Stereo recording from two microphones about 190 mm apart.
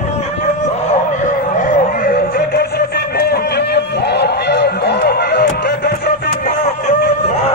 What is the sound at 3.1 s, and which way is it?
Run, 55° left (ahead or behind).